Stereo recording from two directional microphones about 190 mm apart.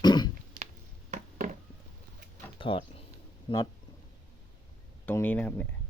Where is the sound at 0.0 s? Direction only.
20° left (ahead or behind).